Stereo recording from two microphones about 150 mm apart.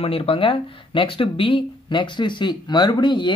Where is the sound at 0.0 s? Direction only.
40° left (ahead or behind).